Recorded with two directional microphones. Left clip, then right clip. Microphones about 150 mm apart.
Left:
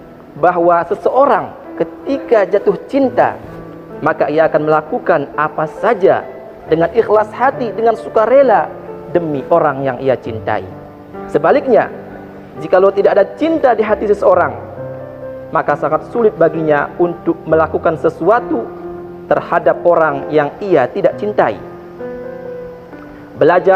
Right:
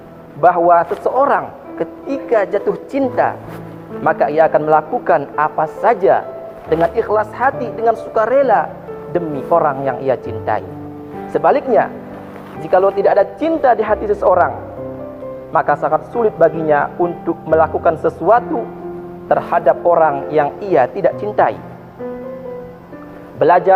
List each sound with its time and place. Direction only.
0.4 s a man's voice: 70° left (ahead or behind)
15.5 s a man's voice: 65° left (ahead or behind)
23.4 s a man's voice: 70° left (ahead or behind)